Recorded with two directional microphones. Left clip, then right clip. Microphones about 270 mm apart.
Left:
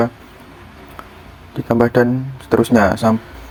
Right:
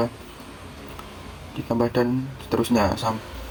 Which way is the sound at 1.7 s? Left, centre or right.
Left.